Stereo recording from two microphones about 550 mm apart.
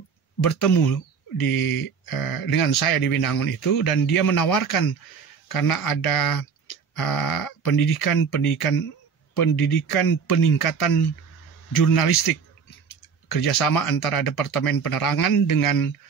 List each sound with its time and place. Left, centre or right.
1.4 s speech: left
13.3 s speech: left